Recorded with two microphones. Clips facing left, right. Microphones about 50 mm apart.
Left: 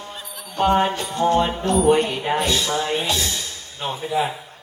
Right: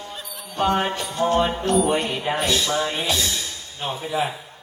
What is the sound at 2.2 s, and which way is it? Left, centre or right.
Speech, left.